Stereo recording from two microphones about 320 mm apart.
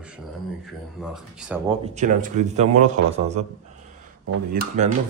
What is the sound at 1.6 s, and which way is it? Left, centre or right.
Speech, right.